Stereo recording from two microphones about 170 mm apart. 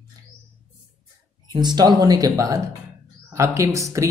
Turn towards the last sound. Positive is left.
turn(degrees=-15)  # may be behind; listen again after turning